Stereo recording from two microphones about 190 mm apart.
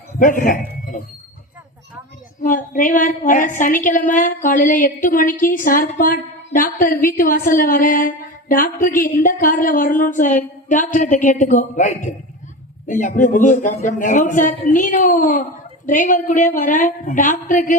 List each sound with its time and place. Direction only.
0.2 s a woman's voice: 45° left (ahead or behind)
2.4 s a woman's voice: 45° left (ahead or behind)